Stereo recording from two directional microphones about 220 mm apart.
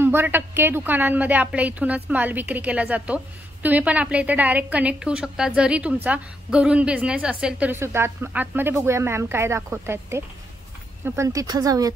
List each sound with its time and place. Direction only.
0.0 s a woman's voice: 10° right (ahead or behind)